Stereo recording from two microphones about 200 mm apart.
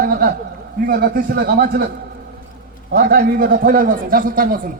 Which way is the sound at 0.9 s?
50° right (ahead or behind).